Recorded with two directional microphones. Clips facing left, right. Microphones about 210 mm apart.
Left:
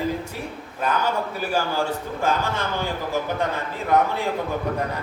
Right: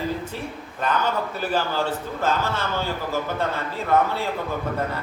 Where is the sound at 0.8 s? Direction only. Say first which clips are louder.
Even; 10° left (ahead or behind).